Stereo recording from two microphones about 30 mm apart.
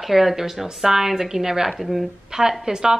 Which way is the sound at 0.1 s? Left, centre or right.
Centre.